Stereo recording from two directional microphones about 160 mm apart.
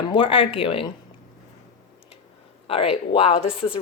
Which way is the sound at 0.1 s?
30° left (ahead or behind).